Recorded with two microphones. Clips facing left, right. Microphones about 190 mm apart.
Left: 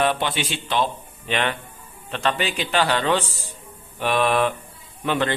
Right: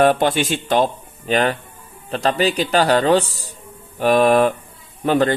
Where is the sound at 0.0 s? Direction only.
45° right (ahead or behind).